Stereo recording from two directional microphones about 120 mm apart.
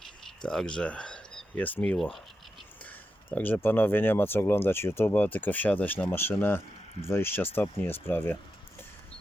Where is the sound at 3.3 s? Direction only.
15° left (ahead or behind).